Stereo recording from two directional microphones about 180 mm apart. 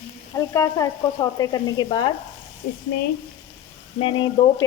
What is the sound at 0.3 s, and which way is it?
Speech, 15° left (ahead or behind).